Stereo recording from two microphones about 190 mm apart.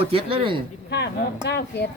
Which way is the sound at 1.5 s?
60° left (ahead or behind).